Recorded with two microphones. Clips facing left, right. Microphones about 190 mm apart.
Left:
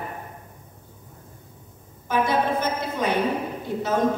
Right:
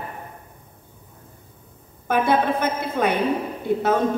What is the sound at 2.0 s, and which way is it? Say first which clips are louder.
A woman's voice: right 3 dB; 60° right (ahead or behind).